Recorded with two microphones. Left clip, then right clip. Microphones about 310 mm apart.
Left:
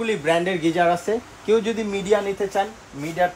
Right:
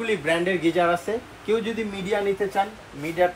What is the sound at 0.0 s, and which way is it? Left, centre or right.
Speech, left.